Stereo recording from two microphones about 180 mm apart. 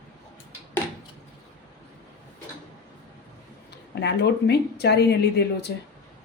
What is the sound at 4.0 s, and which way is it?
Speech, 70° left (ahead or behind).